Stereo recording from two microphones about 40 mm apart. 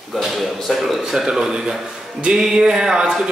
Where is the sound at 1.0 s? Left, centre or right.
Centre.